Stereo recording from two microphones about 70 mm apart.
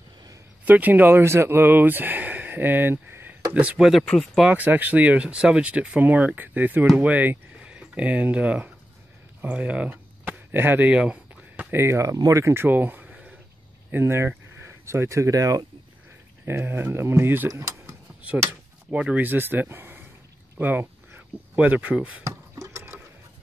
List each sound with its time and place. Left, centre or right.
0.7 s speech: right
3.5 s speech: centre
10.9 s a sound: centre
11.7 s speech: right
12.5 s a sound: right
13.9 s speech: right
16.4 s speech: right
17.5 s speech: right
18.5 s speech: centre
20.5 s a sound: right
21.5 s speech: right
22.2 s a sound: right